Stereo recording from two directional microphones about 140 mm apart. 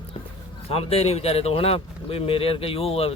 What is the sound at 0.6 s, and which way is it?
Speech, 45° left (ahead or behind).